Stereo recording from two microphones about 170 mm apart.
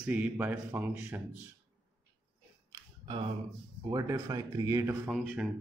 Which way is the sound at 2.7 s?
30° right (ahead or behind).